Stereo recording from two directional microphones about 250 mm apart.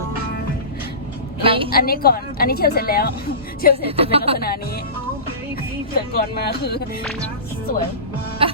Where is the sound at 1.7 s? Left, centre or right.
Left.